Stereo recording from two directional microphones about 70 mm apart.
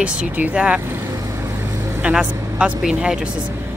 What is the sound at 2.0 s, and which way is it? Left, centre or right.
Speech, centre.